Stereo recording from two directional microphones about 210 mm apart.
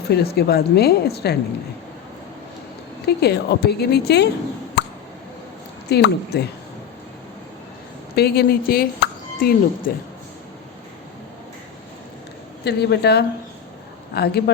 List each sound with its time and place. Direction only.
0.1 s a woman's voice: 50° left (ahead or behind)
3.1 s a woman's voice: 50° left (ahead or behind)
5.9 s a woman's voice: 50° left (ahead or behind)
8.1 s speech: 50° left (ahead or behind)
12.6 s a woman's voice: 50° left (ahead or behind)